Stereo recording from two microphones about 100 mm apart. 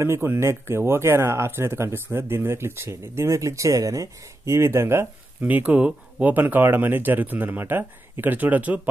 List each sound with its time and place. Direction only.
0.0 s speech: 25° right (ahead or behind)